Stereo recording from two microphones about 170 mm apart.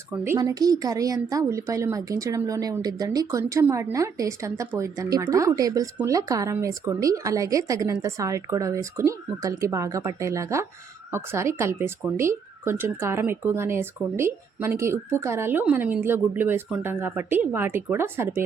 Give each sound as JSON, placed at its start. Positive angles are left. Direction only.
{"t": 0.3, "sound": "speech", "side_deg": -20}